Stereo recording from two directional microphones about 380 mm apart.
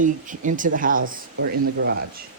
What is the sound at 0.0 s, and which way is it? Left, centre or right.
Speech, centre.